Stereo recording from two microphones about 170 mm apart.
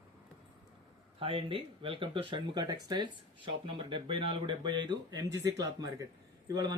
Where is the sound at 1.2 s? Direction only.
30° right (ahead or behind).